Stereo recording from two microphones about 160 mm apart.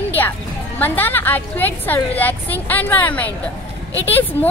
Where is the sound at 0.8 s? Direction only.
10° left (ahead or behind).